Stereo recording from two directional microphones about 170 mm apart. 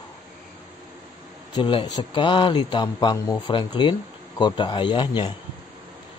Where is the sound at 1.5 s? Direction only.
25° left (ahead or behind).